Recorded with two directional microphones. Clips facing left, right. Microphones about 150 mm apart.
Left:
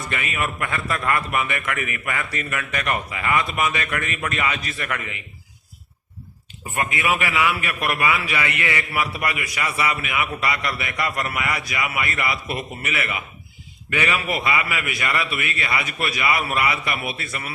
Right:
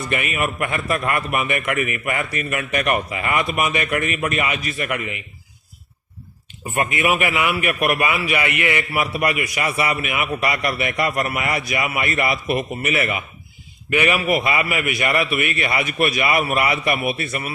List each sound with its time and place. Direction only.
0.1 s a man's voice: 20° right (ahead or behind)
6.9 s a man's voice: 20° right (ahead or behind)